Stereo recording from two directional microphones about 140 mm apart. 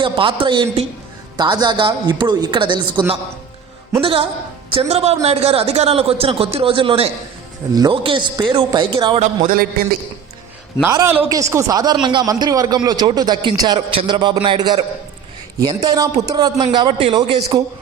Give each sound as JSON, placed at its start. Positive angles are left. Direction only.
{"t": 0.0, "sound": "a man's voice", "side_deg": -40}
{"t": 4.0, "sound": "a man's voice", "side_deg": -40}
{"t": 9.2, "sound": "speech", "side_deg": -75}
{"t": 10.8, "sound": "a man's voice", "side_deg": -20}